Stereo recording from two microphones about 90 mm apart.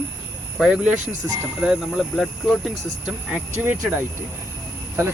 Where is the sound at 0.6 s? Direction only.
10° right (ahead or behind).